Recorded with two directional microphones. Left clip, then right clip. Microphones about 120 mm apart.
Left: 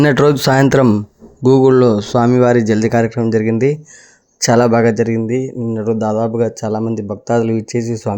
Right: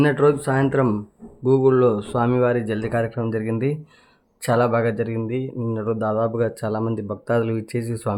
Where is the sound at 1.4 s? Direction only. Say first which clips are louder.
Left 7 dB; 75° left (ahead or behind).